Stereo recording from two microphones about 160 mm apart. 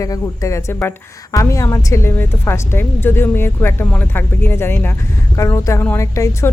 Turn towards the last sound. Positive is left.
turn(degrees=20)  # may be behind; listen again after turning